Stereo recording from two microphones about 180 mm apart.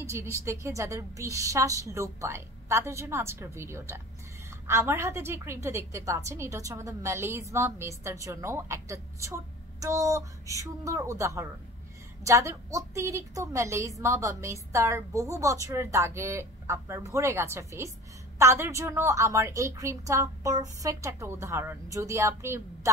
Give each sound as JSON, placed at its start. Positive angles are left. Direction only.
{"t": 0.0, "sound": "a woman's voice", "side_deg": -15}